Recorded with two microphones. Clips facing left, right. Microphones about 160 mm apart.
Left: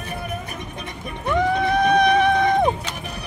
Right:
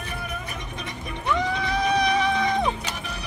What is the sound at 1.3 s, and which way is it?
Music, 55° left (ahead or behind).